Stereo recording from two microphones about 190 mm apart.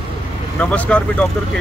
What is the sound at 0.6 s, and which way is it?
Speech, 5° left (ahead or behind).